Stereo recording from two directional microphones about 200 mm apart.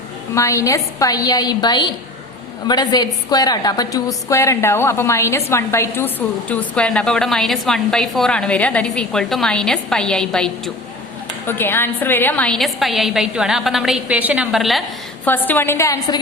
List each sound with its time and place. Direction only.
0.3 s a woman's voice: 15° left (ahead or behind)